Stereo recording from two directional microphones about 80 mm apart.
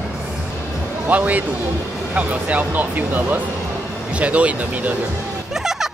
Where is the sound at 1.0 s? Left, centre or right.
Right.